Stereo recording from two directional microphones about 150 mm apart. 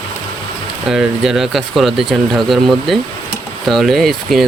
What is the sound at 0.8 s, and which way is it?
Speech, 5° right (ahead or behind).